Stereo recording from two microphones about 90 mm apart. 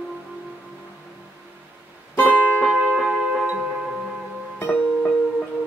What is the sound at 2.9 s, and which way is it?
Music, centre (ahead or behind).